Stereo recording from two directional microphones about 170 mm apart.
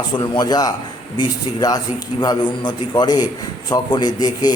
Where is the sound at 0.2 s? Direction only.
25° left (ahead or behind).